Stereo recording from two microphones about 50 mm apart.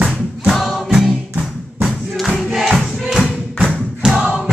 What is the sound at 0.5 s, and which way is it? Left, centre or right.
Music, centre.